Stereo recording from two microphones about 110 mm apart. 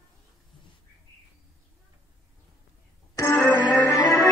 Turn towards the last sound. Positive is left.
turn(degrees=30)  # may be behind; listen again after turning